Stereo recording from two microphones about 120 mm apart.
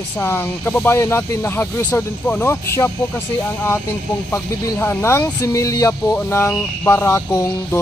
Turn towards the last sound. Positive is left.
turn(degrees=25)  # may be behind; listen again after turning